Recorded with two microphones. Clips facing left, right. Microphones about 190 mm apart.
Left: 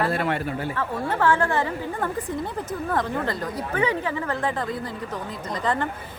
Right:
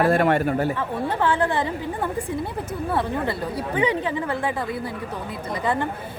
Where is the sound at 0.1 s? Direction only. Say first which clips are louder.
Right 6 dB; 50° right (ahead or behind).